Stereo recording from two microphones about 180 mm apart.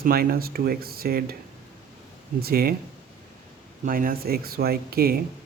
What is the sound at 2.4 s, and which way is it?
Speech, 55° right (ahead or behind).